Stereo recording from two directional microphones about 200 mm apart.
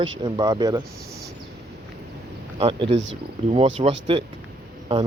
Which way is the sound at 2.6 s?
25° right (ahead or behind).